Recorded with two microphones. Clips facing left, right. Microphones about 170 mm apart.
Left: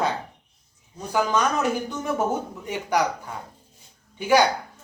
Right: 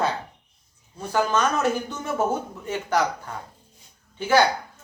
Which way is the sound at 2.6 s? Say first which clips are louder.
Even; 15° left (ahead or behind).